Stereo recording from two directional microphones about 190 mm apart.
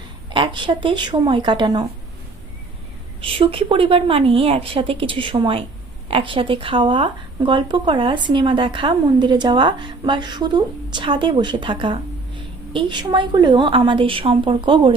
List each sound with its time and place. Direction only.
0.3 s speech: 25° right (ahead or behind)
3.2 s speech: 30° right (ahead or behind)